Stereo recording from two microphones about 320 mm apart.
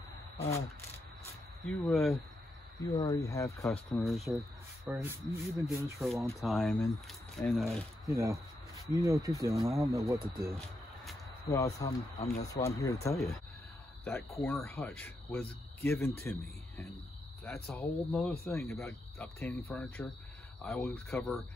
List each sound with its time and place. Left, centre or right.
0.4 s speech: centre
1.7 s speech: centre
11.5 s speech: centre
14.4 s speech: centre